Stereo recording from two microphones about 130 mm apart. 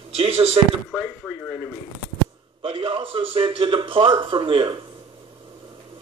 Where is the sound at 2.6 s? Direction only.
45° right (ahead or behind).